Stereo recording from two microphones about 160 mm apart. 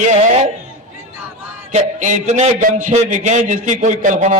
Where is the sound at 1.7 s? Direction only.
50° right (ahead or behind).